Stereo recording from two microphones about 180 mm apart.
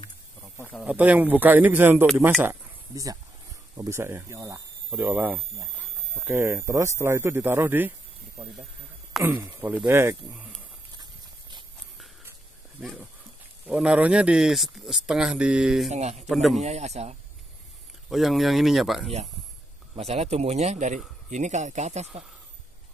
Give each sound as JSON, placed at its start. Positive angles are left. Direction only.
{"t": 0.7, "sound": "speech", "side_deg": -10}
{"t": 9.2, "sound": "speech", "side_deg": -15}
{"t": 13.7, "sound": "speech", "side_deg": -5}
{"t": 15.9, "sound": "a man's voice", "side_deg": -40}
{"t": 16.3, "sound": "speech", "side_deg": 0}
{"t": 16.6, "sound": "a man's voice", "side_deg": -35}
{"t": 18.1, "sound": "speech", "side_deg": 0}
{"t": 20.0, "sound": "a man's voice", "side_deg": -35}